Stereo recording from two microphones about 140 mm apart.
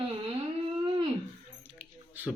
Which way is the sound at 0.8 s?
35° right (ahead or behind).